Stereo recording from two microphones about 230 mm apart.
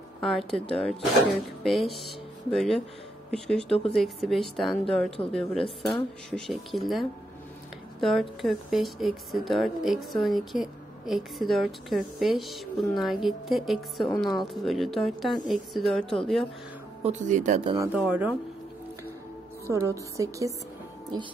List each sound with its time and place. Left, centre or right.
0.2 s speech: centre
17.0 s speech: right
17.7 s speech: centre
19.7 s a woman's voice: centre